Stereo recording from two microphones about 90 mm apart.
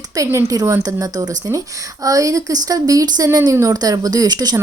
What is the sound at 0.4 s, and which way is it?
Speech, 35° right (ahead or behind).